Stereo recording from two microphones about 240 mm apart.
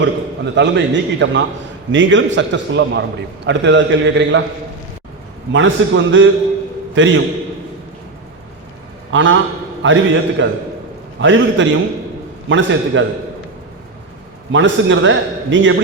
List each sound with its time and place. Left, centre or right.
0.5 s a man's voice: right
5.5 s a man's voice: right
9.1 s a man's voice: right
14.5 s a man's voice: right